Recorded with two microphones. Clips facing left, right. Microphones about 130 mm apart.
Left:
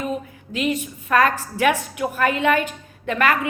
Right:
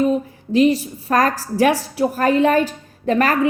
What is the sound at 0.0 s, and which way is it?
A woman's voice, 35° right (ahead or behind).